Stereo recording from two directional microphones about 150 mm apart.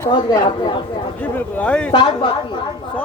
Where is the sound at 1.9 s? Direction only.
35° left (ahead or behind).